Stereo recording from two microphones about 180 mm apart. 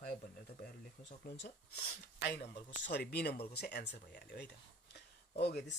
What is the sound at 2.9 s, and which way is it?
Speech, 65° left (ahead or behind).